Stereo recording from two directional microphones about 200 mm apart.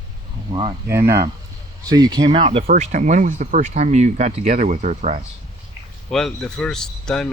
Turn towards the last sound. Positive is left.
turn(degrees=5)  # may be behind; listen again after turning